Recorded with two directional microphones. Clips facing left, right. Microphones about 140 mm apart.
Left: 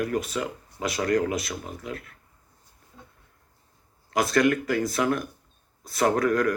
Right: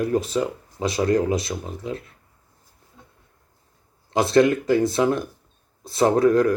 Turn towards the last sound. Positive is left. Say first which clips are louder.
# right 5 dB
turn(degrees=-25)  # may be behind; listen again after turning